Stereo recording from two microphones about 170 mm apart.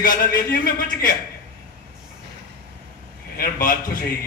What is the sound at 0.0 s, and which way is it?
A man's voice, 55° left (ahead or behind).